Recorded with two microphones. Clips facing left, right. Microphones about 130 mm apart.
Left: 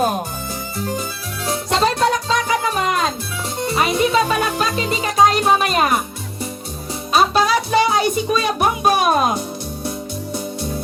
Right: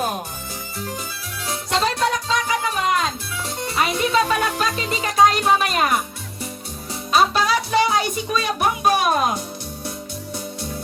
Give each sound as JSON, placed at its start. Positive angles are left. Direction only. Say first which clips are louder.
{"t": 0.8, "sound": "music", "louder": "left 6 dB", "side_deg": 30}
{"t": 3.6, "sound": "music", "louder": "left 4 dB", "side_deg": 20}
{"t": 7.1, "sound": "music", "louder": "left 2 dB", "side_deg": 10}